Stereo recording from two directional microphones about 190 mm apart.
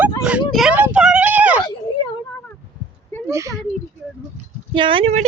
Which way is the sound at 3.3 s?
15° right (ahead or behind).